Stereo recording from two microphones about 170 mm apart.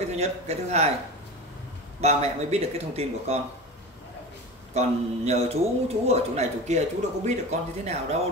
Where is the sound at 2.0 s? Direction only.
40° right (ahead or behind).